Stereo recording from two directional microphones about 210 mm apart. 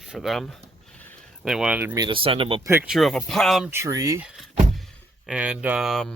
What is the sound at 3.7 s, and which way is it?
Speech, 15° right (ahead or behind).